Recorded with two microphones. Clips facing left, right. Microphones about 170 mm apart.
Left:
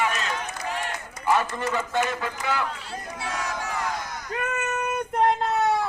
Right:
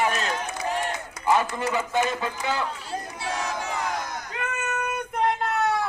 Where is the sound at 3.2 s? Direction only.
30° right (ahead or behind).